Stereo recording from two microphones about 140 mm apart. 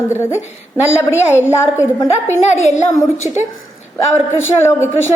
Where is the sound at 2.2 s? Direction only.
55° left (ahead or behind).